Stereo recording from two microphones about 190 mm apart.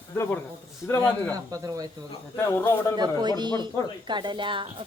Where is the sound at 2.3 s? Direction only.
15° left (ahead or behind).